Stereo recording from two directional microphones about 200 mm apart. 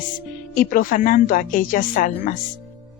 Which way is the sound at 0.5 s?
45° left (ahead or behind).